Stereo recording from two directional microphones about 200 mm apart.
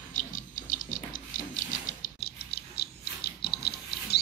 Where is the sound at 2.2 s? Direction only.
50° left (ahead or behind).